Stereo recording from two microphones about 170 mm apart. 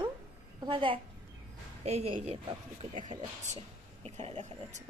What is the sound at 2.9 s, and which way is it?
Speech, 50° right (ahead or behind).